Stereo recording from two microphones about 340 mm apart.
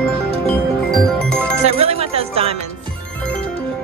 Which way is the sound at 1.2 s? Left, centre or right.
Centre.